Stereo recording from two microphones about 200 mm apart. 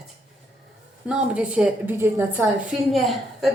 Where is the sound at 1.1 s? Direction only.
5° right (ahead or behind).